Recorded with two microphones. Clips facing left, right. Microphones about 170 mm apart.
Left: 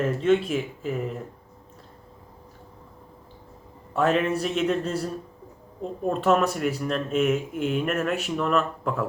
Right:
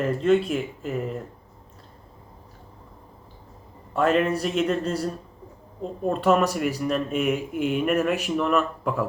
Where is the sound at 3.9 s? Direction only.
Centre (ahead or behind).